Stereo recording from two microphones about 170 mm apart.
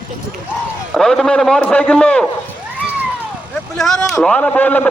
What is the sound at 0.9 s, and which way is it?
A man's voice, centre (ahead or behind).